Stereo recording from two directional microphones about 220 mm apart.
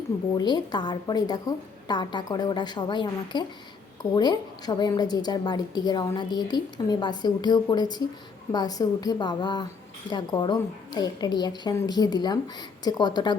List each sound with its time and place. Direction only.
0.3 s a woman's voice: 20° left (ahead or behind)